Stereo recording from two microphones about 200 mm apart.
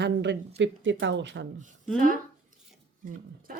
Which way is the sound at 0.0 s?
60° right (ahead or behind).